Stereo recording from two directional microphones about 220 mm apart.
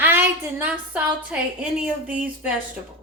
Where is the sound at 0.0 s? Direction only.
10° right (ahead or behind).